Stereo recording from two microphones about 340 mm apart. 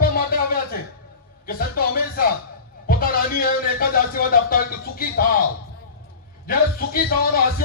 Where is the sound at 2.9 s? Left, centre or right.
Left.